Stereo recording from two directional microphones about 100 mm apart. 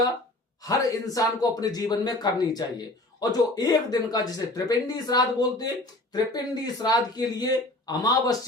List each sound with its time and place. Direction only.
0.6 s a man's voice: 35° left (ahead or behind)